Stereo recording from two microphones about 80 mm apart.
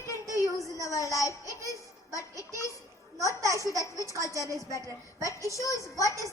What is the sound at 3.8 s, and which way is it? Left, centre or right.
A woman's voice, left.